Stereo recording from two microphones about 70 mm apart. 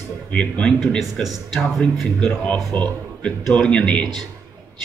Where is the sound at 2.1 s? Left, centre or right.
Centre.